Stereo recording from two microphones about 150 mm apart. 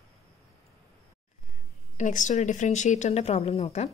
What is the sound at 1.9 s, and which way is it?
Speech, 55° left (ahead or behind).